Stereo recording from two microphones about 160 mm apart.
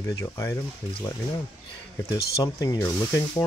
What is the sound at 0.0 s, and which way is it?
Speech, 20° left (ahead or behind).